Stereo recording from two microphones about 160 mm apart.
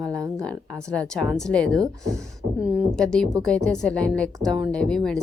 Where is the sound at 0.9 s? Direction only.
5° left (ahead or behind).